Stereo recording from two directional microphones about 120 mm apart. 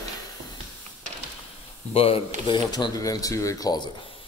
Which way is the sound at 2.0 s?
55° left (ahead or behind).